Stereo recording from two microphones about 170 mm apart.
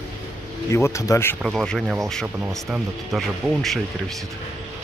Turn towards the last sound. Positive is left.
turn(degrees=0)  # may be behind; listen again after turning